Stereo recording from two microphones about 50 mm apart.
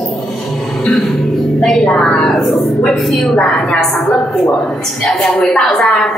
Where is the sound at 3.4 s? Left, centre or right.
Left.